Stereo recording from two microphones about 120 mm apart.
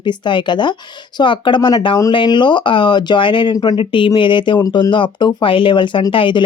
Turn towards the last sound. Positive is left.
turn(degrees=45)  # may be behind; listen again after turning